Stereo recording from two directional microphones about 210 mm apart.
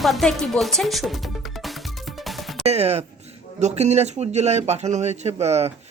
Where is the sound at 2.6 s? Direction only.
30° right (ahead or behind).